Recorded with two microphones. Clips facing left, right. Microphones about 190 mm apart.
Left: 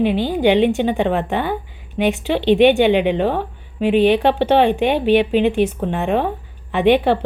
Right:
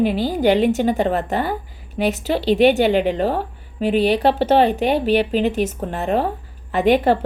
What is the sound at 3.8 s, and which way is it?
A woman's voice, 40° right (ahead or behind).